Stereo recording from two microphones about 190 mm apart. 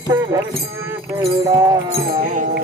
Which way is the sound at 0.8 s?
15° right (ahead or behind).